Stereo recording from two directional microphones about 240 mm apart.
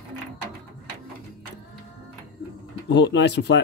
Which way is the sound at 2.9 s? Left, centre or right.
Left.